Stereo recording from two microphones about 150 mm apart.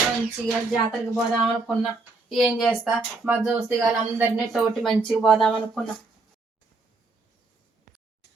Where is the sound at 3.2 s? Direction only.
10° right (ahead or behind).